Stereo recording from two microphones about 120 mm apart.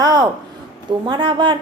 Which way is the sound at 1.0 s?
45° right (ahead or behind).